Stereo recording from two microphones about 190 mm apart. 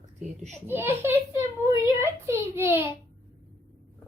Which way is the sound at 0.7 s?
10° right (ahead or behind).